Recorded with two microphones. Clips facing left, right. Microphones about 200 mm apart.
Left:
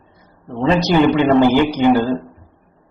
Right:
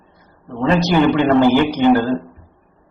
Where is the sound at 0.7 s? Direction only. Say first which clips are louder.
Even; 15° left (ahead or behind).